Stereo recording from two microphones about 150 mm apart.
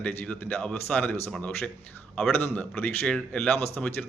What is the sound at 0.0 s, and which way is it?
Speech, 5° left (ahead or behind).